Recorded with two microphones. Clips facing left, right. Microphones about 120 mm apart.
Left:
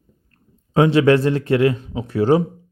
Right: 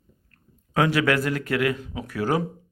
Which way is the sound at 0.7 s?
25° left (ahead or behind).